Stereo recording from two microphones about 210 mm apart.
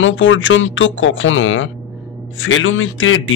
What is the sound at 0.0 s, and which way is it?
Speech, 65° left (ahead or behind).